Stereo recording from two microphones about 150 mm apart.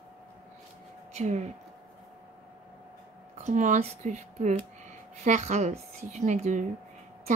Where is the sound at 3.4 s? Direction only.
55° right (ahead or behind).